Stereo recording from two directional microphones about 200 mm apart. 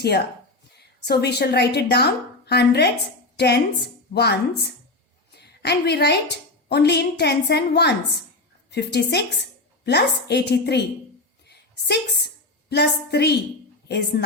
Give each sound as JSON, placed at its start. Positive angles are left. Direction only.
{"t": 1.0, "sound": "a woman's voice", "side_deg": 55}
{"t": 11.4, "sound": "a sound", "side_deg": 55}
{"t": 13.8, "sound": "a woman's voice", "side_deg": 55}